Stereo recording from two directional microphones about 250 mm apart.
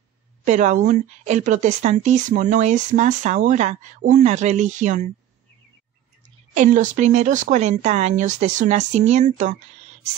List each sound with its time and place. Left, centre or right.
0.5 s speech: right
6.5 s speech: right